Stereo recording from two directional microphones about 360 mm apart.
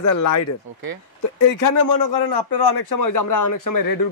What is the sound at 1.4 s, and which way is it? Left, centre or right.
A man's voice, left.